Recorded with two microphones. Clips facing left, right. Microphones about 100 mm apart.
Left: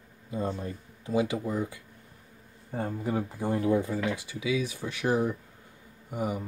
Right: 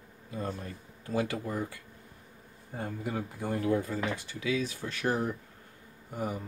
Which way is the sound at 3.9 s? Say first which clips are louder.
Left 3 dB; 10° left (ahead or behind).